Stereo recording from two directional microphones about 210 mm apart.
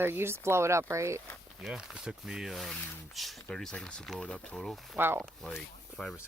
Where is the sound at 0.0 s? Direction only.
10° right (ahead or behind).